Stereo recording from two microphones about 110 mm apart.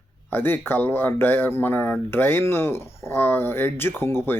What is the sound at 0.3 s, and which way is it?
Speech, 15° left (ahead or behind).